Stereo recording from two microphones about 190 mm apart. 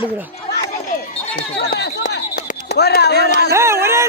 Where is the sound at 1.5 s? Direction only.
60° left (ahead or behind).